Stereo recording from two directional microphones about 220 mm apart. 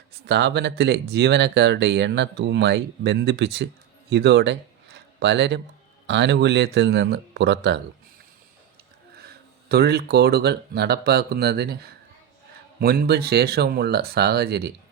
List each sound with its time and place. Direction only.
0.3 s speech: 50° right (ahead or behind)
9.1 s speech: 45° right (ahead or behind)